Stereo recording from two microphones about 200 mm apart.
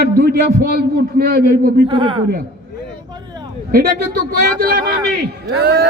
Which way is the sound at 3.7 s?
45° right (ahead or behind).